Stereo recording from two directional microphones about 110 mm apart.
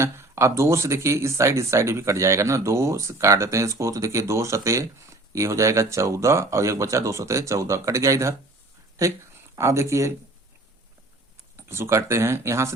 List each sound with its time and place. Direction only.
0.0 s speech: 25° right (ahead or behind)
9.6 s speech: 25° right (ahead or behind)
11.5 s speech: 25° right (ahead or behind)